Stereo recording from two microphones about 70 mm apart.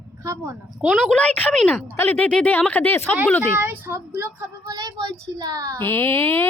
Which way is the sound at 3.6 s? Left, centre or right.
Right.